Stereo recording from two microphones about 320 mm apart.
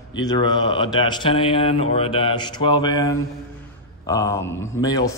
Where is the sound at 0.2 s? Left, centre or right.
Centre.